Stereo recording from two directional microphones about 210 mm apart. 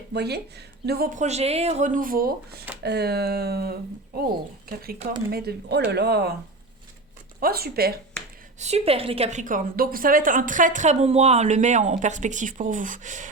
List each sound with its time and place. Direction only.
0.1 s a woman's voice: 50° right (ahead or behind)
5.3 s speech: 50° right (ahead or behind)
7.3 s speech: 45° right (ahead or behind)
8.5 s a woman's voice: 30° right (ahead or behind)